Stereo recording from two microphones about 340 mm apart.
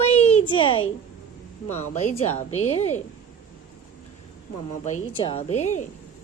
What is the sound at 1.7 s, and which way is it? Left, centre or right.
Speech, centre.